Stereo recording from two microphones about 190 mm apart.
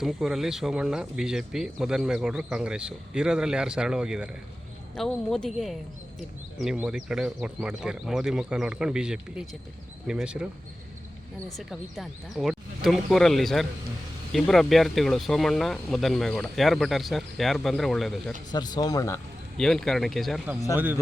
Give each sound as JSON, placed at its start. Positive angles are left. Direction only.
{"t": 0.0, "sound": "speech", "side_deg": 0}
{"t": 6.6, "sound": "speech", "side_deg": -5}
{"t": 18.5, "sound": "speech", "side_deg": 20}
{"t": 19.5, "sound": "speech", "side_deg": 5}
{"t": 20.7, "sound": "a man's voice", "side_deg": -10}